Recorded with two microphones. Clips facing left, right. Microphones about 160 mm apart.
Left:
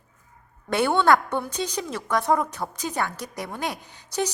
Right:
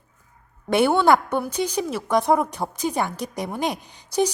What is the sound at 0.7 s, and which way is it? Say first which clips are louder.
A woman's voice: right 3 dB; 10° right (ahead or behind).